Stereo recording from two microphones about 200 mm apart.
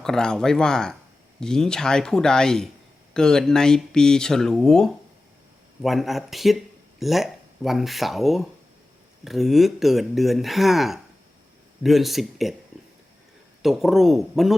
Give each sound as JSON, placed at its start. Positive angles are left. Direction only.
{"t": 0.0, "sound": "speech", "side_deg": 5}
{"t": 13.6, "sound": "speech", "side_deg": 0}